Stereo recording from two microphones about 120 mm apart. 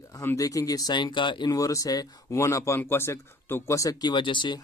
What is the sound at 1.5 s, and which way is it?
Speech, 25° left (ahead or behind).